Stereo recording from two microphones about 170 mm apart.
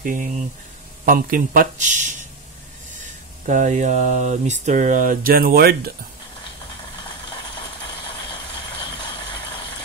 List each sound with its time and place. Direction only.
0.0 s speech: 50° right (ahead or behind)
3.4 s speech: 45° right (ahead or behind); by 5.8 s 65° right (ahead or behind)